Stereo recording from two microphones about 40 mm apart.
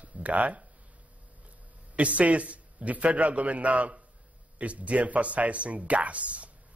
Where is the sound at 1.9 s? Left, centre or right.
Right.